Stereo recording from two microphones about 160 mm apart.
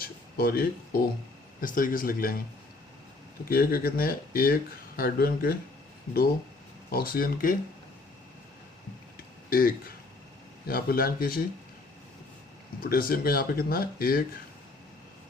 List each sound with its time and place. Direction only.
0.0 s a sound: 70° left (ahead or behind)
1.6 s speech: 60° left (ahead or behind)
3.4 s speech: 70° left (ahead or behind)
6.9 s speech: 65° left (ahead or behind)
9.1 s a sound: 65° left (ahead or behind)
10.7 s speech: 65° left (ahead or behind)
12.8 s speech: 65° left (ahead or behind)